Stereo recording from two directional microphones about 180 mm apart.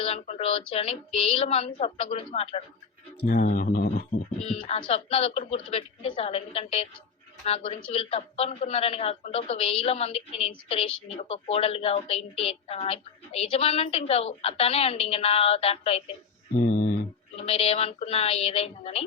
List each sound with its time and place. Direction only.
0.0 s a woman's voice: 35° left (ahead or behind)
3.2 s speech: 50° left (ahead or behind)
4.4 s a woman's voice: 30° left (ahead or behind)
16.6 s speech: 45° left (ahead or behind)
17.4 s a woman's voice: 35° left (ahead or behind)